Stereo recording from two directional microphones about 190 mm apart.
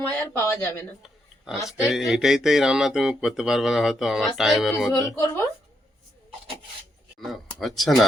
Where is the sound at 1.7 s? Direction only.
Centre (ahead or behind).